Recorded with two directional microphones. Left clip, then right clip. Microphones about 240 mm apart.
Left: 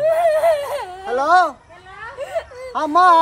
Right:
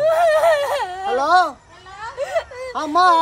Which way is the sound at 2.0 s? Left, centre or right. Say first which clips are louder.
Right 3 dB; centre.